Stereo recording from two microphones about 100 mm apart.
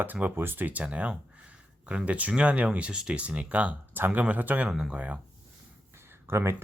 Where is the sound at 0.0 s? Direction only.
20° right (ahead or behind).